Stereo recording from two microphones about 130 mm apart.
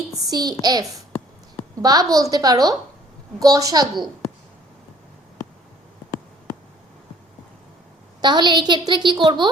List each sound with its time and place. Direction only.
0.1 s a sound: 30° right (ahead or behind)
0.6 s a woman's voice: 30° right (ahead or behind)
8.2 s a woman's voice: 35° right (ahead or behind)